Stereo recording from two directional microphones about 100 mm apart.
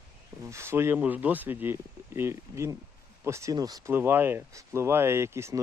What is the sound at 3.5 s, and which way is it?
Speech, 40° right (ahead or behind).